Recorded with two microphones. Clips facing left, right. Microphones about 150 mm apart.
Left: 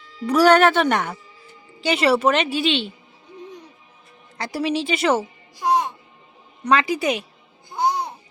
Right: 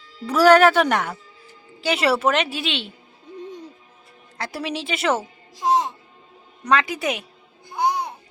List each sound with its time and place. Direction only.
0.3 s a woman's voice: 5° right (ahead or behind)
4.4 s a woman's voice: centre (ahead or behind)
5.5 s speech: 25° right (ahead or behind)
6.7 s a woman's voice: centre (ahead or behind)